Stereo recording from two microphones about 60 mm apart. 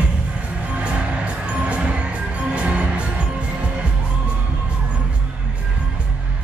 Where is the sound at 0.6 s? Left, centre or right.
Right.